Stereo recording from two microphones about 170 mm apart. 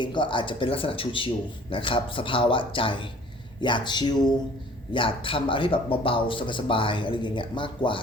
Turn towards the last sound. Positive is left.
turn(degrees=30)  # may be behind; listen again after turning